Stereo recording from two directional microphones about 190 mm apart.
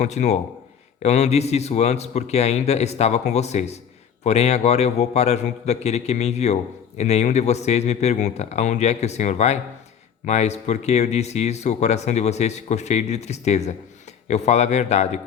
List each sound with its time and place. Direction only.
0.0 s a man's voice: 35° left (ahead or behind)